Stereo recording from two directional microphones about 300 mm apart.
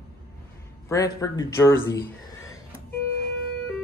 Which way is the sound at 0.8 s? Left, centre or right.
Centre.